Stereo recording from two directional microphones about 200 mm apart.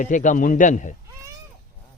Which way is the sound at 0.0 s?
40° left (ahead or behind).